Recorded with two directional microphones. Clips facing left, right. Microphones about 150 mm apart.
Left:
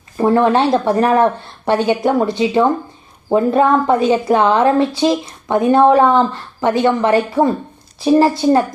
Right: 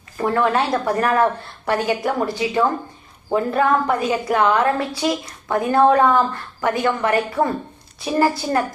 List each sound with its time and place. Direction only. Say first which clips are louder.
0.2 s a woman's voice: left 6 dB; 25° left (ahead or behind)